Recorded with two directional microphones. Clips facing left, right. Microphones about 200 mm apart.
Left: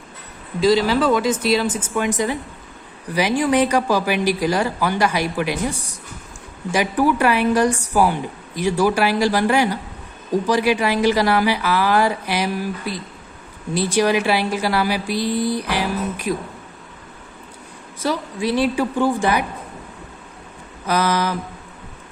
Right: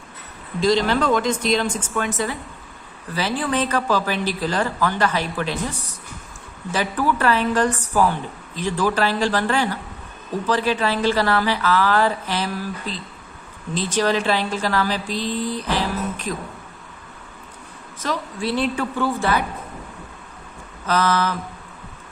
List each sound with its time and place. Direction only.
0.6 s a woman's voice: 5° left (ahead or behind)
18.0 s a woman's voice: 10° left (ahead or behind)
20.8 s a woman's voice: 10° left (ahead or behind)